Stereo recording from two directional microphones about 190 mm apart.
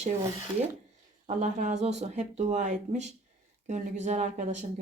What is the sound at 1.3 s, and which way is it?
Speech, 40° right (ahead or behind).